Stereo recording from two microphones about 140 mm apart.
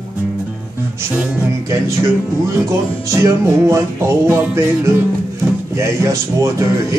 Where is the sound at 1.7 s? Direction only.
20° right (ahead or behind).